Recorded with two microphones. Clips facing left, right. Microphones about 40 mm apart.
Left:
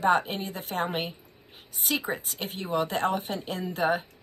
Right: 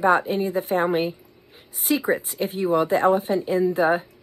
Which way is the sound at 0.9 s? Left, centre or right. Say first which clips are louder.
Right 9 dB; left.